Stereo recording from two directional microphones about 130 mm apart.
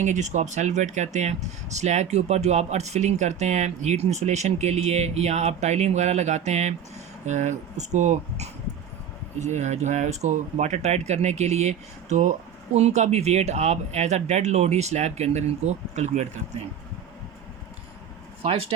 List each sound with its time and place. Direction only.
0.0 s speech: 65° right (ahead or behind)
18.4 s speech: 50° right (ahead or behind)